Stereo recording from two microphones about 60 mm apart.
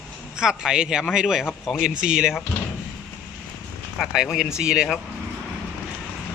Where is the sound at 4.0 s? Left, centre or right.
Centre.